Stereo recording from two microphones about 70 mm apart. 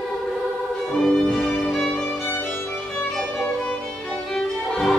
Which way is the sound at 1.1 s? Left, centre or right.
Centre.